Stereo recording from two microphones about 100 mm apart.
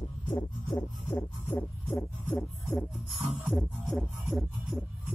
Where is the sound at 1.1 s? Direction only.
25° left (ahead or behind).